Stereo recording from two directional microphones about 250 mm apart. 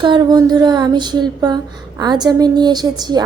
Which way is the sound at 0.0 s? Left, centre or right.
Centre.